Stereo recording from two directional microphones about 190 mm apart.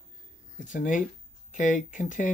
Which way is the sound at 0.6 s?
40° left (ahead or behind).